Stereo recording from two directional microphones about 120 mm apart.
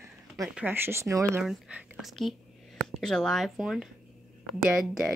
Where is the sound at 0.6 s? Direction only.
15° right (ahead or behind).